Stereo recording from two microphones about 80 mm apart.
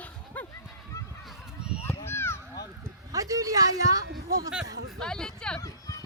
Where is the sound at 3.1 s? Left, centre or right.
Right.